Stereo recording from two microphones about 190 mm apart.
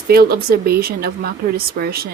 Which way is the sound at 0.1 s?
55° right (ahead or behind).